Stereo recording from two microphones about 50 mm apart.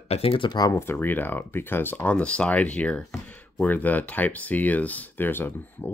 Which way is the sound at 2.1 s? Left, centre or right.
Left.